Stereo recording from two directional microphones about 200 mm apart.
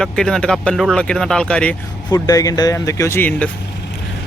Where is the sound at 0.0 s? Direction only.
5° left (ahead or behind).